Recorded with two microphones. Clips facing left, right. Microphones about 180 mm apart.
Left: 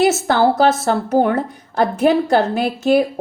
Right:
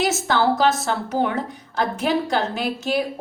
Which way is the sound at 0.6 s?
50° left (ahead or behind).